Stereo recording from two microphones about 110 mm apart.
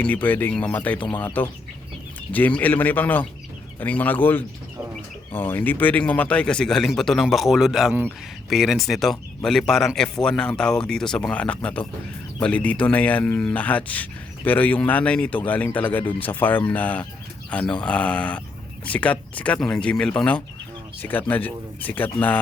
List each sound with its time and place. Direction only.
0.0 s speech: 15° left (ahead or behind)